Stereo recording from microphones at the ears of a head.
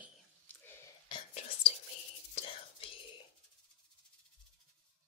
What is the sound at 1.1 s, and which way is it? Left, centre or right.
Whispering, left.